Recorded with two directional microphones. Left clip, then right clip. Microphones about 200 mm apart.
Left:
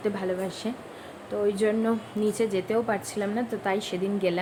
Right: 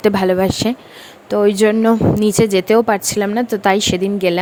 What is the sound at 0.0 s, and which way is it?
A woman's voice, 55° right (ahead or behind).